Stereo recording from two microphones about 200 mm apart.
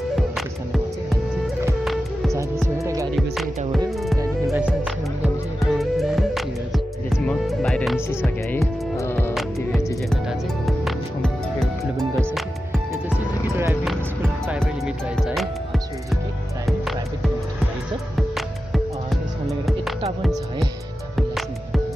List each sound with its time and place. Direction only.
2.8 s music: 15° right (ahead or behind)
4.2 s music: 10° right (ahead or behind)
8.5 s music: 15° left (ahead or behind)
10.9 s music: centre (ahead or behind)
13.8 s music: centre (ahead or behind)
18.7 s music: centre (ahead or behind)